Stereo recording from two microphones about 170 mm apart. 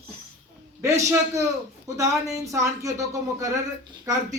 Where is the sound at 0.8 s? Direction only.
15° right (ahead or behind).